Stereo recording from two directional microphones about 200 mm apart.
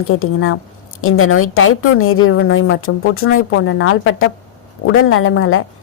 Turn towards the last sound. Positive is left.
turn(degrees=90)